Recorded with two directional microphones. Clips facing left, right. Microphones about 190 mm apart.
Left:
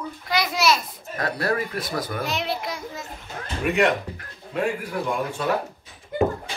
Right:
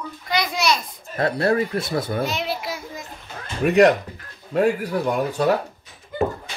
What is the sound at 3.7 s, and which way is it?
A man's voice, 40° right (ahead or behind).